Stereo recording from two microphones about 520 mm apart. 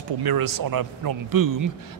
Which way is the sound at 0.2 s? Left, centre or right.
Right.